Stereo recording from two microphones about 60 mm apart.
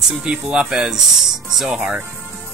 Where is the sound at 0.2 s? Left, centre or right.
Centre.